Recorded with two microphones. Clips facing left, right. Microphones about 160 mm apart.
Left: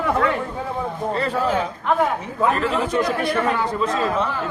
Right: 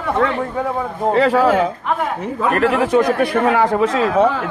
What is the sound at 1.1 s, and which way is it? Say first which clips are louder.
Speech: right 9 dB; 85° right.